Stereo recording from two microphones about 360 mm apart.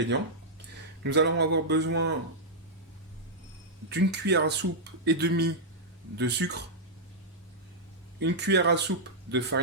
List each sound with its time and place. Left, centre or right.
1.0 s speech: right
3.8 s speech: right
8.2 s speech: right